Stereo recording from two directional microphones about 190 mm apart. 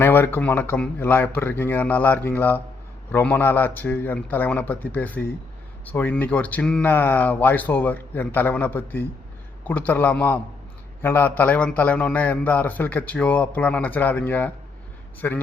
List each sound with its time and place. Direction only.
0.0 s a man's voice: 10° left (ahead or behind)